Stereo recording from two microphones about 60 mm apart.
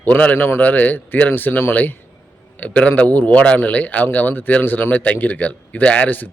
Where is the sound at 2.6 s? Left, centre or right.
Left.